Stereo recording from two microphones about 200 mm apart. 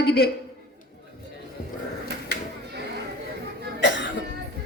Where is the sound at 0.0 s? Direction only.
55° left (ahead or behind).